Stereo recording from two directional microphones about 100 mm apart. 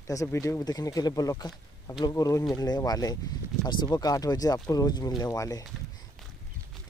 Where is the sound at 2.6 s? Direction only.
40° left (ahead or behind).